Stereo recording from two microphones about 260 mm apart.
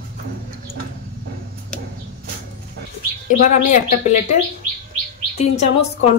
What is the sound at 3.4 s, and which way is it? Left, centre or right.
Speech, left.